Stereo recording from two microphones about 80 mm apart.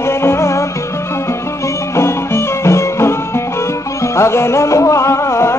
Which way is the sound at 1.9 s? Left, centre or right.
Left.